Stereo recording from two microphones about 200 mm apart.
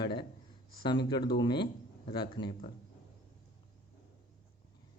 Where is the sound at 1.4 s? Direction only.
20° left (ahead or behind).